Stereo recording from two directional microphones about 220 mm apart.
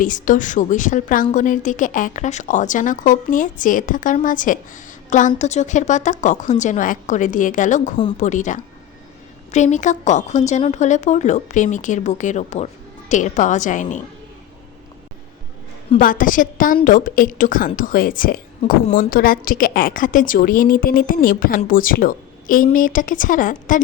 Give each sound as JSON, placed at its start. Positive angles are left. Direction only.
{"t": 0.0, "sound": "a woman's voice", "side_deg": 35}
{"t": 16.0, "sound": "a woman's voice", "side_deg": 40}